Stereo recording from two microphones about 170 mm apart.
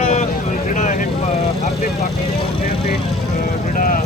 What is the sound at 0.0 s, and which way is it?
Vehicle, 40° left (ahead or behind).